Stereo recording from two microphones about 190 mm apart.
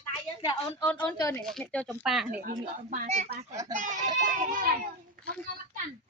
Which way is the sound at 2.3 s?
45° right (ahead or behind).